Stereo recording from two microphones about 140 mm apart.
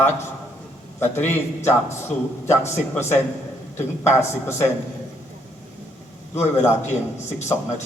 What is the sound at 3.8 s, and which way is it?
Speech, 20° left (ahead or behind).